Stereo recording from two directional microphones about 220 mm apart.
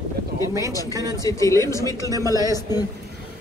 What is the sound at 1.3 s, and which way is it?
A woman's voice, 15° left (ahead or behind).